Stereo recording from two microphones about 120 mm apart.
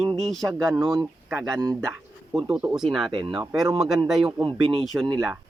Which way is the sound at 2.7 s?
Centre (ahead or behind).